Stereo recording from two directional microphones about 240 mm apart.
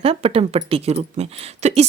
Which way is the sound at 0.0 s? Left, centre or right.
Right.